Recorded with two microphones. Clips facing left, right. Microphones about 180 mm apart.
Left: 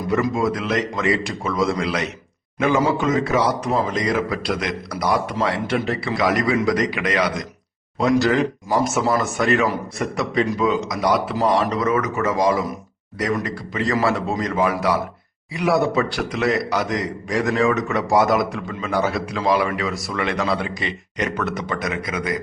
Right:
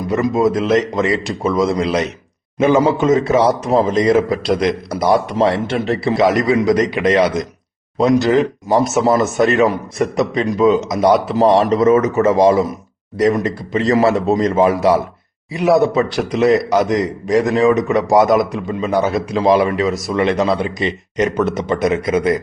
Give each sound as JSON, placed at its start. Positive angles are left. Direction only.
{"t": 0.1, "sound": "a man's voice", "side_deg": -25}